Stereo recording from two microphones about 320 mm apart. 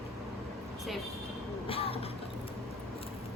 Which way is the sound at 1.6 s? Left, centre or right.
Centre.